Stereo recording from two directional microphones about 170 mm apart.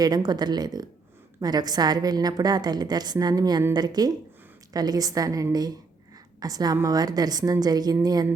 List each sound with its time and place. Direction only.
0.0 s a woman's voice: 25° right (ahead or behind)